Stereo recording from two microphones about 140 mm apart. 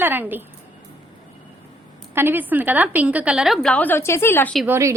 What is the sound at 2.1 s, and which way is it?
A woman's voice, 15° right (ahead or behind).